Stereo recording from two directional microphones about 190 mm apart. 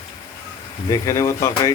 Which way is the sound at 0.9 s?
15° left (ahead or behind).